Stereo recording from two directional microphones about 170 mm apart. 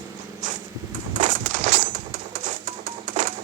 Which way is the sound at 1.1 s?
45° right (ahead or behind).